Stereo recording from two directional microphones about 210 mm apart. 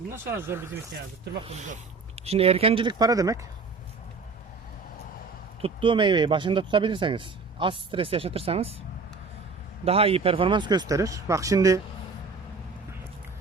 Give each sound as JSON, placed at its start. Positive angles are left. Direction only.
{"t": 0.3, "sound": "speech", "side_deg": -10}
{"t": 1.4, "sound": "speech", "side_deg": -30}
{"t": 5.6, "sound": "speech", "side_deg": -25}
{"t": 9.8, "sound": "speech", "side_deg": -30}